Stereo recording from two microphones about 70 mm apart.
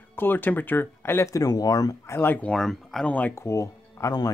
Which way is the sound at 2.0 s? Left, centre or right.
Left.